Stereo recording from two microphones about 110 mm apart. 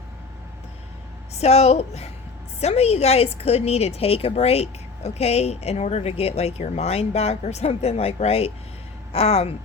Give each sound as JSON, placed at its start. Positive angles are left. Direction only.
{"t": 1.3, "sound": "a woman's voice", "side_deg": 75}